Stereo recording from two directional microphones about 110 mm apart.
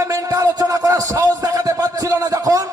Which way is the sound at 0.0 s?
30° right (ahead or behind).